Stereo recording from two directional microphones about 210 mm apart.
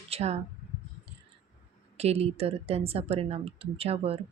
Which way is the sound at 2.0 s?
30° right (ahead or behind).